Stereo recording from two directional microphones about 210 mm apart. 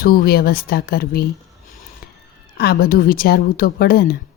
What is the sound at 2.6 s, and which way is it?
A child's voice, 50° left (ahead or behind).